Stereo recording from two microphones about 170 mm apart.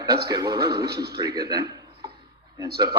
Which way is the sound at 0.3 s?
25° right (ahead or behind).